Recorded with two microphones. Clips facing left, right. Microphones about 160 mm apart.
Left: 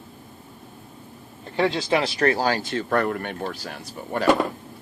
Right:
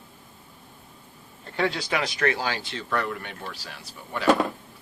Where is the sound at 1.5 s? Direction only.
25° left (ahead or behind); by 4.3 s 45° left (ahead or behind).